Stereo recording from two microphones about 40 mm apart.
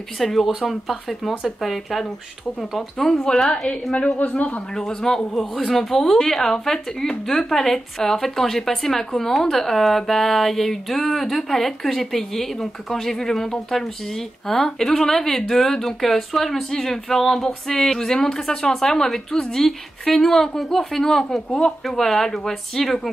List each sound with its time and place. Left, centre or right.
0.2 s speech: centre
3.0 s speech: centre
3.9 s a man's voice: left
4.7 s speech: centre